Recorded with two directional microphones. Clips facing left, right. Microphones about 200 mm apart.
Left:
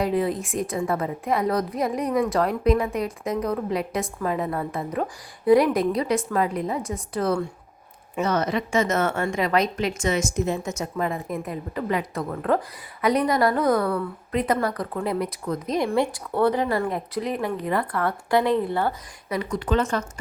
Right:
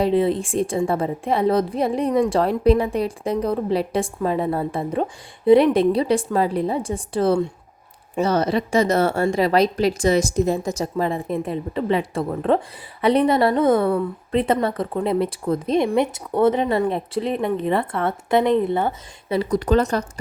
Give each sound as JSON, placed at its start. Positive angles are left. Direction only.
{"t": 0.0, "sound": "a woman's voice", "side_deg": -25}
{"t": 19.4, "sound": "speech", "side_deg": -40}